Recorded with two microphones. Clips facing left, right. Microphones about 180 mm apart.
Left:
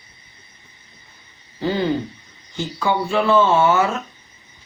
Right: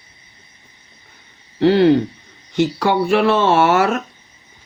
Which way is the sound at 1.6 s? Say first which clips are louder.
Right 9 dB; 70° right (ahead or behind).